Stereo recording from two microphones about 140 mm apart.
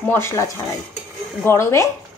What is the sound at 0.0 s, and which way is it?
A woman's voice, 20° left (ahead or behind).